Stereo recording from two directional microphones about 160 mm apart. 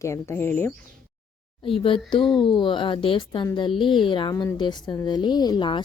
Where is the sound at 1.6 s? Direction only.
35° left (ahead or behind).